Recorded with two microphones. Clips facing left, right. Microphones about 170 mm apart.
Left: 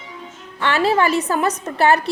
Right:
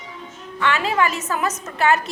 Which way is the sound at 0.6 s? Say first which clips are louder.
Left 3 dB; 35° left (ahead or behind).